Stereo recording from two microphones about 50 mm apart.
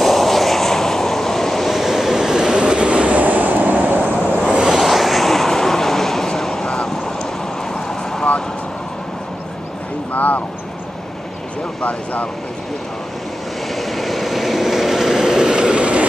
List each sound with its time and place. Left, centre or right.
0.0 s vehicle: centre; by 4.0 s right
4.5 s a sound: centre
4.7 s vehicle: centre
10.1 s vehicle: left
11.8 s vehicle: left
13.7 s vehicle: centre; by 16.1 s right